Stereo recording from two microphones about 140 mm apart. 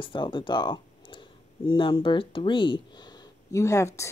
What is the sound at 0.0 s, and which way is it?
Speech, 35° left (ahead or behind).